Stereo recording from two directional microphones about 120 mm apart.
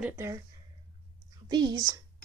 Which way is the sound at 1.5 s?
35° right (ahead or behind).